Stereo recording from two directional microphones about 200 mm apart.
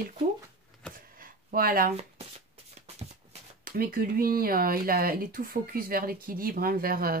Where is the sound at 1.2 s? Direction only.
45° right (ahead or behind).